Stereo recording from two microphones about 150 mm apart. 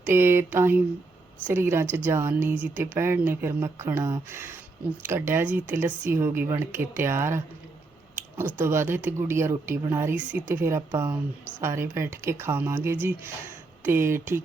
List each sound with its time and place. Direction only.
0.0 s speech: 15° right (ahead or behind)